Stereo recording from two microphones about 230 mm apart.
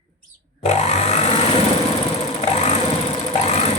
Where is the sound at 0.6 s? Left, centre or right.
Left.